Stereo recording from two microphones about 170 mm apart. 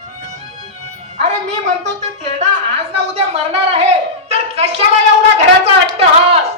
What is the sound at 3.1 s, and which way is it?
Speech, 35° right (ahead or behind).